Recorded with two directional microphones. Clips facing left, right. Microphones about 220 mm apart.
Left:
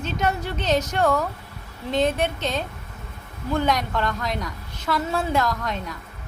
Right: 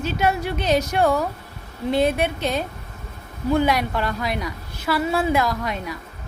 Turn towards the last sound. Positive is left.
turn(degrees=-10)  # may be behind; listen again after turning